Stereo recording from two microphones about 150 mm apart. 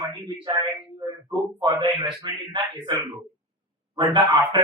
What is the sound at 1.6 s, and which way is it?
Speech, 35° right (ahead or behind).